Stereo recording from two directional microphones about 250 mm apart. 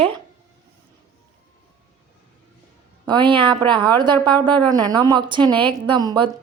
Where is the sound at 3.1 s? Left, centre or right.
Centre.